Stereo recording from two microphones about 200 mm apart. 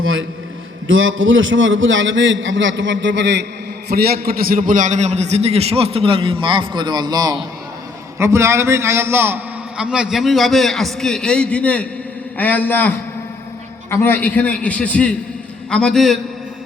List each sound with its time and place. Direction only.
0.0 s a man's voice: 80° right; by 3.4 s 60° right (ahead or behind)
3.8 s a man's voice: 50° right (ahead or behind); by 12.9 s 10° left (ahead or behind)
13.9 s a man's voice: 10° left (ahead or behind)